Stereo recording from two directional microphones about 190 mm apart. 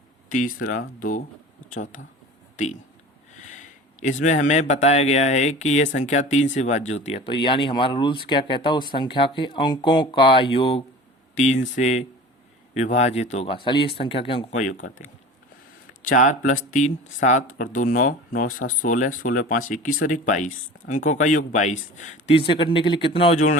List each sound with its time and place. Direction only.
0.3 s speech: 45° left (ahead or behind)
3.3 s a sound: 40° left (ahead or behind)
4.7 s speech: 35° left (ahead or behind)
14.6 s speech: 45° left (ahead or behind)